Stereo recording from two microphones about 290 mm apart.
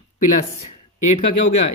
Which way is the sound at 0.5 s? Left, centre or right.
Left.